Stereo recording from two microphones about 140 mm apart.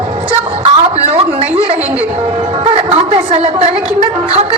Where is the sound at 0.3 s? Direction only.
45° right (ahead or behind).